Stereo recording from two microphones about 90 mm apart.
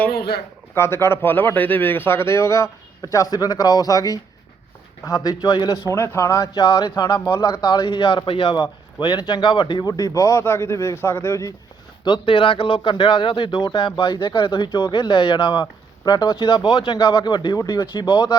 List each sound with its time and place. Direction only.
0.7 s speech: 25° left (ahead or behind)
7.9 s speech: 80° left
8.6 s speech: 55° left (ahead or behind); by 11.5 s 30° left (ahead or behind)
12.0 s speech: 65° left (ahead or behind)